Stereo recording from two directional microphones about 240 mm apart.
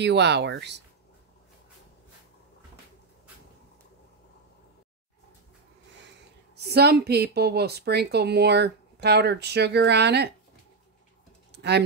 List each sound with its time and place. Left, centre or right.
0.0 s speech: right
6.5 s speech: right
11.5 s typing: right